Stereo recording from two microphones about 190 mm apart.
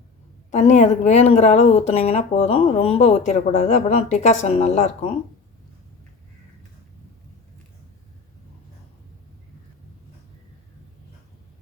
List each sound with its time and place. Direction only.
0.5 s speech: 35° left (ahead or behind)